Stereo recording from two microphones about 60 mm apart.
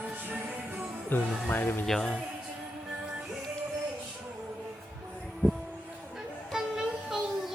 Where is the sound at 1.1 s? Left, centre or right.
Left.